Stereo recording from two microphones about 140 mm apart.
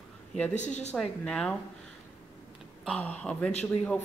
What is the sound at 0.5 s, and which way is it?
Speech, 55° left (ahead or behind).